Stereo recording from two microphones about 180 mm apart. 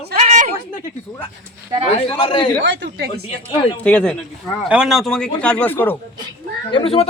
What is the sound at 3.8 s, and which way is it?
Speech, 5° left (ahead or behind).